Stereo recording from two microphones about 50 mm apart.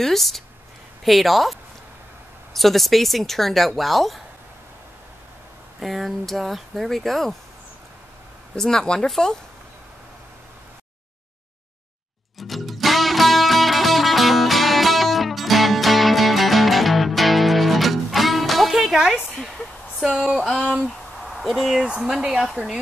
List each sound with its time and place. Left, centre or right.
0.0 s speech: centre
5.8 s speech: centre
8.5 s speech: centre
12.4 s music: centre
20.1 s speech: centre
20.8 s a sound: centre
21.8 s speech: centre
22.1 s speech: centre